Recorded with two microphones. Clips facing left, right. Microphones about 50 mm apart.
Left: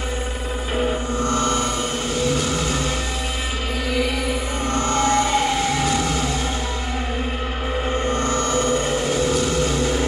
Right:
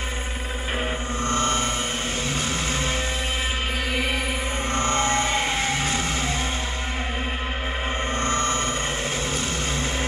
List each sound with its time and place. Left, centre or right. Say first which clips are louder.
1.3 s mantra: left 2 dB; right
4.7 s music: left 4 dB; right
8.1 s vehicle: left 1 dB; right